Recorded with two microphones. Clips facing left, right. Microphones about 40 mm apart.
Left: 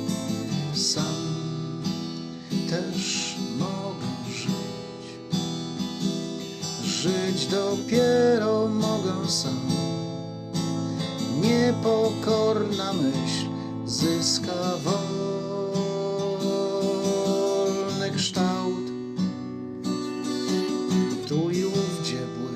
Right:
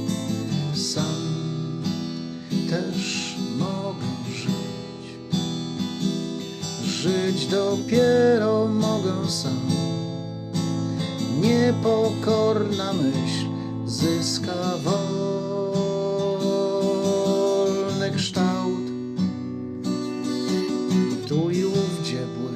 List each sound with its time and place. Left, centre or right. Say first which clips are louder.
0.8 s music: even; centre
2.5 s music: right 2 dB; centre
6.8 s music: right 3 dB; centre
11.3 s music: right 2 dB; centre
21.0 s music: right 2 dB; right
21.4 s music: right 3 dB; centre